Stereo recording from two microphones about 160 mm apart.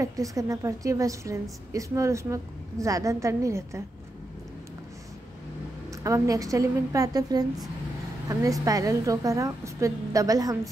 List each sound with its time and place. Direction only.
0.0 s a woman's voice: 20° right (ahead or behind)
5.9 s a woman's voice: 20° right (ahead or behind)